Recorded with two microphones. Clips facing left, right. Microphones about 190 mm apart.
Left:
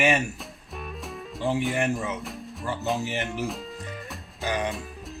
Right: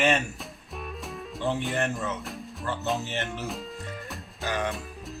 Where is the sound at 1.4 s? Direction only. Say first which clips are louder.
Left 3 dB; 10° left (ahead or behind).